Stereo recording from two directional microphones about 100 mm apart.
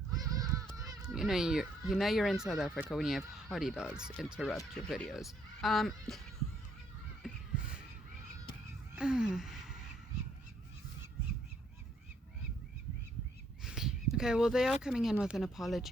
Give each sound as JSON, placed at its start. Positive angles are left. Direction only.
{"t": 0.1, "sound": "goose", "side_deg": -35}
{"t": 1.0, "sound": "speech", "side_deg": -5}
{"t": 7.2, "sound": "crow", "side_deg": -5}
{"t": 9.0, "sound": "gasp", "side_deg": -5}
{"t": 13.7, "sound": "speech", "side_deg": -5}